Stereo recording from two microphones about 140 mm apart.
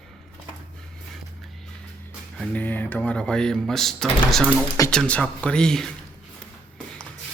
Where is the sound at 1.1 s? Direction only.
Centre (ahead or behind).